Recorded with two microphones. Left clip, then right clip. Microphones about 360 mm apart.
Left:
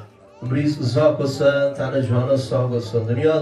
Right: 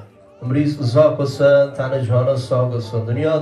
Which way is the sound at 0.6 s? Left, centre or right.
Centre.